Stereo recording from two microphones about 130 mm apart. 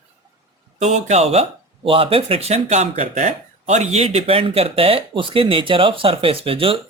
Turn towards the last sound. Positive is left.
turn(degrees=-45)  # may be behind; listen again after turning